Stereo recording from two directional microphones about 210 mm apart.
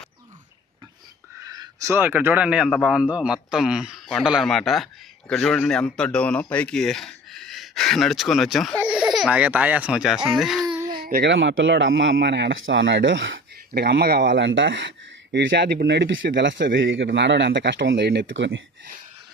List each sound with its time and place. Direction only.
1.5 s a man's voice: 15° right (ahead or behind); by 10.7 s centre (ahead or behind)
10.8 s baby cry: 20° right (ahead or behind)
11.0 s speech: 50° right (ahead or behind)
13.7 s speech: 50° right (ahead or behind)